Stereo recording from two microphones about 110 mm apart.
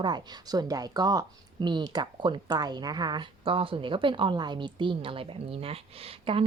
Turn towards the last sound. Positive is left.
turn(degrees=-60)  # may be behind; listen again after turning